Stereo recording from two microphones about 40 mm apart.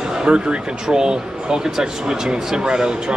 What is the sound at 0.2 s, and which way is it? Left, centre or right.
Speech, right.